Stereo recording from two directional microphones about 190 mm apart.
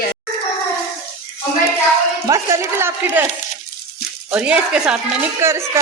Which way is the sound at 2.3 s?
15° right (ahead or behind).